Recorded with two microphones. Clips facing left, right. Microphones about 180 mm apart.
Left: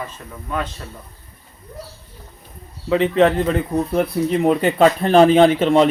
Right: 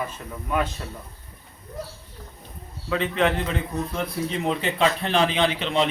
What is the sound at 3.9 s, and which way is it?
Speech, 55° left (ahead or behind).